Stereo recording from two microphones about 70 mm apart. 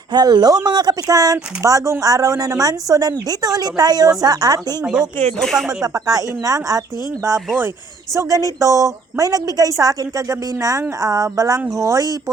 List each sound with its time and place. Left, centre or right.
0.1 s a woman's voice: right
4.8 s speech: centre
5.4 s speech: centre
5.8 s speech: right
8.1 s a woman's voice: right